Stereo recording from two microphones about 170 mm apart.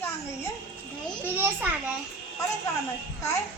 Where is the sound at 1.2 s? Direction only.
10° right (ahead or behind).